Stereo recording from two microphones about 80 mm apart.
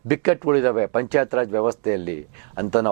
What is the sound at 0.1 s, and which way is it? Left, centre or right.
Speech, centre.